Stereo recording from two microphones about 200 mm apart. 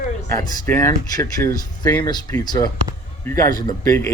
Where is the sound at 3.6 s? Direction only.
15° left (ahead or behind).